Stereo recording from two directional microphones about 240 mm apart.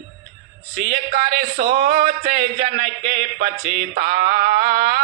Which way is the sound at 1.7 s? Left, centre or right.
Right.